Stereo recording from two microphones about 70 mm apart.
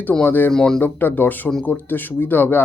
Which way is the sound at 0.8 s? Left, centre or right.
Left.